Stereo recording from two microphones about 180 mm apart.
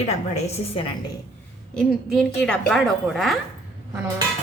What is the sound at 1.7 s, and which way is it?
A woman's voice, 5° left (ahead or behind).